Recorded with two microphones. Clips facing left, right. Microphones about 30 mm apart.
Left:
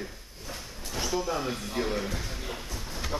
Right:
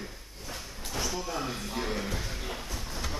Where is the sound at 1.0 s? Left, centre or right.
Centre.